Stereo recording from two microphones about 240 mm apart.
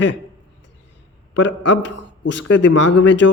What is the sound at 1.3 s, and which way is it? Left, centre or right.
Speech, left.